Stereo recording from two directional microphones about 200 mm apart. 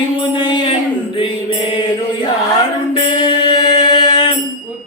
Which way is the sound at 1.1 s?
25° left (ahead or behind).